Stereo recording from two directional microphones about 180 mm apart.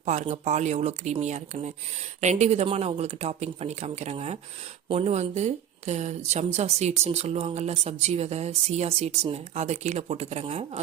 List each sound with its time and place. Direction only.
0.0 s a woman's voice: 40° right (ahead or behind)